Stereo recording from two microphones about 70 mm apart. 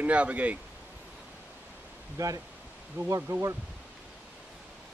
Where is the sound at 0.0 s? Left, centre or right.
Centre.